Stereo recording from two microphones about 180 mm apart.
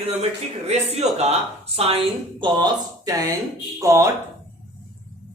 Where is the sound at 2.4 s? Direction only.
20° right (ahead or behind).